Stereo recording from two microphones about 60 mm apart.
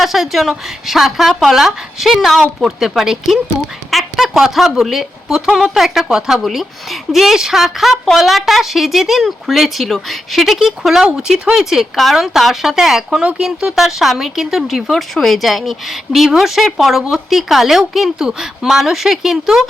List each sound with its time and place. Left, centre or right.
0.0 s a woman's voice: centre